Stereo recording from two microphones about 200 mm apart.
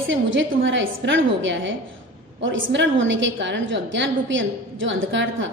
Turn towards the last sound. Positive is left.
turn(degrees=-70)  # may be behind; listen again after turning